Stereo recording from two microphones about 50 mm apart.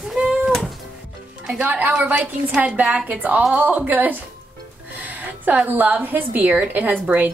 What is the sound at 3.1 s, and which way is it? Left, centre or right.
Speech, right.